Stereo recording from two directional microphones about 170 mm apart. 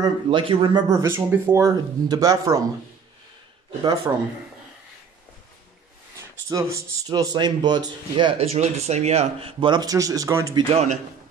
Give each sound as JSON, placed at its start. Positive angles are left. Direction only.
{"t": 0.0, "sound": "speech", "side_deg": -30}
{"t": 6.5, "sound": "speech", "side_deg": -20}
{"t": 10.7, "sound": "a man's voice", "side_deg": -40}